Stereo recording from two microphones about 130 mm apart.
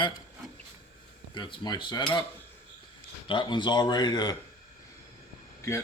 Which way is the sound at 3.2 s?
35° left (ahead or behind).